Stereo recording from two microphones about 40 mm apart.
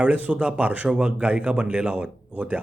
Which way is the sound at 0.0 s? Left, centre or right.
Right.